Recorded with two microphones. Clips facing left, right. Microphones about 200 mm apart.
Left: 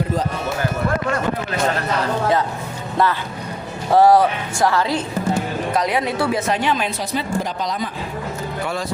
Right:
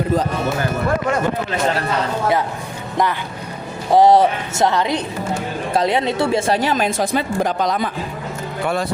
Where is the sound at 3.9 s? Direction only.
20° right (ahead or behind); by 7.9 s 60° right (ahead or behind).